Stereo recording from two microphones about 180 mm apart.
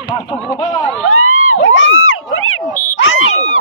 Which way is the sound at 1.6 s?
90° left.